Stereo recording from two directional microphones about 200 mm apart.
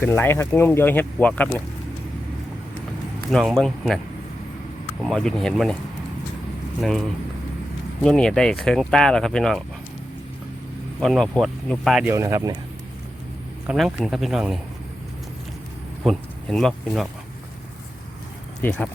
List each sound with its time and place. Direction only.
0.0 s speech: 10° left (ahead or behind)
3.3 s speech: centre (ahead or behind)
5.0 s speech: centre (ahead or behind)
8.0 s speech: 5° left (ahead or behind)
11.0 s speech: centre (ahead or behind)
12.1 s speech: 15° right (ahead or behind)
13.7 s speech: centre (ahead or behind)
16.0 s speech: centre (ahead or behind)
18.6 s speech: 5° left (ahead or behind)